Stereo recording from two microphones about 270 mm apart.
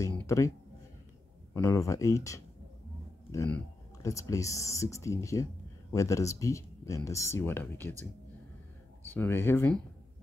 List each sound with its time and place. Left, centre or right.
0.0 s a sound: centre
1.5 s speech: centre
9.1 s speech: centre